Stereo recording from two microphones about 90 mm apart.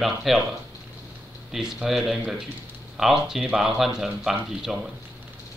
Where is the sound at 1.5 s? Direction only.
5° right (ahead or behind).